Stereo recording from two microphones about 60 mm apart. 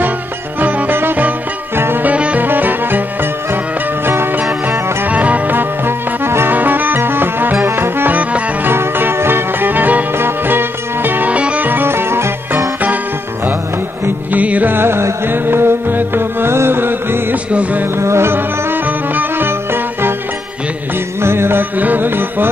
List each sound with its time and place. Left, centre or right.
0.6 s music: right
0.9 s music: right
2.0 s music: right
5.0 s music: right
8.1 s music: right
8.6 s music: right
11.3 s music: right
14.3 s music: right
17.5 s music: right
17.9 s music: right
21.2 s music: right